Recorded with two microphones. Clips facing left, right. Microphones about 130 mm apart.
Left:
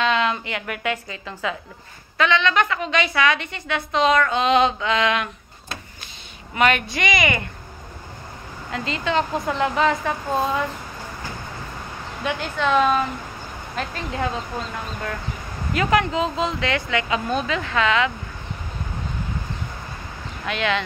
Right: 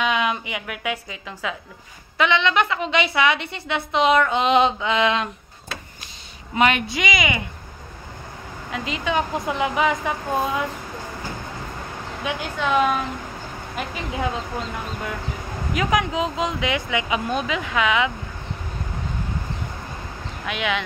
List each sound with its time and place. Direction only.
0.0 s a woman's voice: 10° right (ahead or behind)
2.1 s a woman's voice: 20° right (ahead or behind)
6.5 s a woman's voice: 20° right (ahead or behind)
7.0 s speech: 5° right (ahead or behind)
8.7 s speech: 5° right (ahead or behind)
12.2 s speech: 5° right (ahead or behind)
20.4 s speech: 5° right (ahead or behind)